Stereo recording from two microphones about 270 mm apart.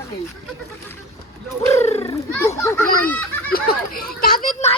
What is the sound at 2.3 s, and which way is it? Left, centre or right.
Speech, centre.